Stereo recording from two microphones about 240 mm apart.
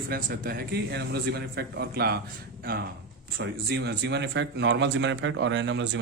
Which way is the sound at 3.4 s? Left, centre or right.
Right.